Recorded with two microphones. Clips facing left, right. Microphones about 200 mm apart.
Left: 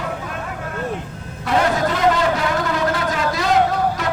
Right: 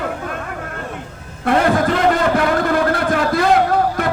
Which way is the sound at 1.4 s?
55° right (ahead or behind).